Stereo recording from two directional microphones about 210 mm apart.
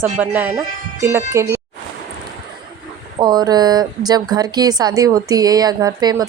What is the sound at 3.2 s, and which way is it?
A woman's voice, 20° right (ahead or behind).